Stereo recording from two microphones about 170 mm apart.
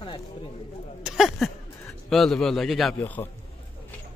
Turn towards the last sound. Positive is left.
turn(degrees=10)  # may be behind; listen again after turning